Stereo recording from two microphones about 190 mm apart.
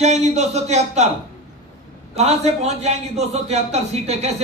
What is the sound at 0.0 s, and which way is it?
A man's voice, 35° right (ahead or behind).